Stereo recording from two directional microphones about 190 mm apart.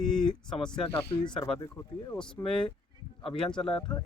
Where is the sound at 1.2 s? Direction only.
25° left (ahead or behind).